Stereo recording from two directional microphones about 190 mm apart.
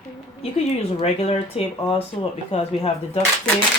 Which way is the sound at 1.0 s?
30° left (ahead or behind).